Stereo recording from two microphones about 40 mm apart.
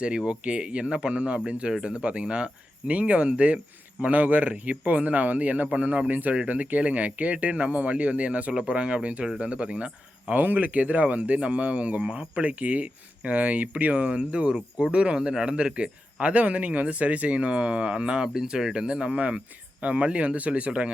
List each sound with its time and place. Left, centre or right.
0.3 s a man's voice: right
10.3 s a man's voice: right